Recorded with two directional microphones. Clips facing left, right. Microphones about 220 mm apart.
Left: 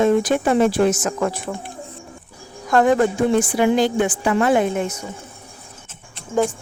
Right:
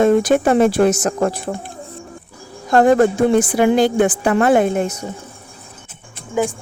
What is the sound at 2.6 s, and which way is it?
Speech, 35° right (ahead or behind).